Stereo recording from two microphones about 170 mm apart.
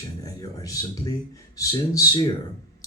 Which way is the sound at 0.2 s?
20° left (ahead or behind).